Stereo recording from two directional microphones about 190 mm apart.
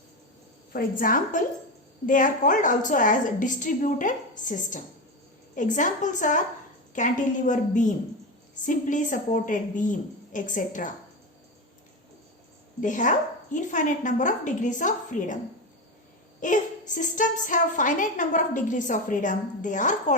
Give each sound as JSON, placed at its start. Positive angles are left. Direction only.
{"t": 0.7, "sound": "a woman's voice", "side_deg": 50}
{"t": 12.8, "sound": "a woman's voice", "side_deg": 40}
{"t": 16.4, "sound": "a woman's voice", "side_deg": 40}